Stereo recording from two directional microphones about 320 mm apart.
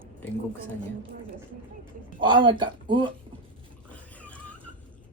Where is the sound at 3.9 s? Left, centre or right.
Centre.